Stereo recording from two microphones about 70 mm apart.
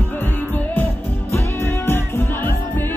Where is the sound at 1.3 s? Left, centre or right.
Left.